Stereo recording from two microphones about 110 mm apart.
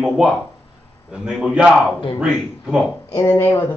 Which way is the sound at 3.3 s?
20° left (ahead or behind).